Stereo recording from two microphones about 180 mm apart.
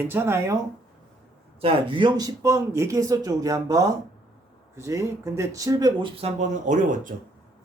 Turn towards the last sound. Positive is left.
turn(degrees=-45)  # may be behind; listen again after turning